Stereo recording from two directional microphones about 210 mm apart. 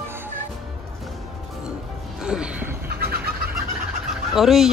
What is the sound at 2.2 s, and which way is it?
Music, 5° right (ahead or behind).